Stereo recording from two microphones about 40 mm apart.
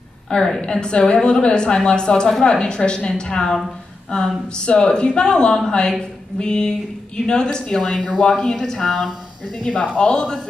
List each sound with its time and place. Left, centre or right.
0.3 s a woman's voice: left